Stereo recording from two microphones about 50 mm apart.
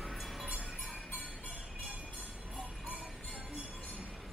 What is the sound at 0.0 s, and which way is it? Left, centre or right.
Music, centre.